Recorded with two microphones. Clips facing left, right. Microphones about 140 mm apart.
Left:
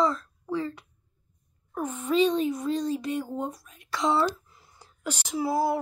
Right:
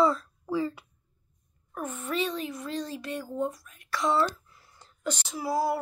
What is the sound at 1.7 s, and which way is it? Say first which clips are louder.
Speech: left 5 dB; 15° left (ahead or behind).